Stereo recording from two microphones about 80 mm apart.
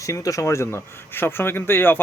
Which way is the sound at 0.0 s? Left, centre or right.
Left.